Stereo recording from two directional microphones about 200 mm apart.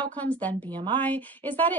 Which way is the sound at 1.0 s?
10° left (ahead or behind).